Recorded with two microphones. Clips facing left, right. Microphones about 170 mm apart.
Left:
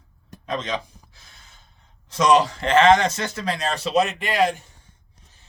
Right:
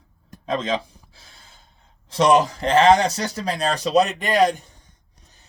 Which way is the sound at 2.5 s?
35° right (ahead or behind).